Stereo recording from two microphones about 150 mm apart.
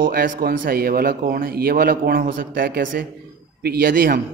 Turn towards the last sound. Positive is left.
turn(degrees=-75)  # may be behind; listen again after turning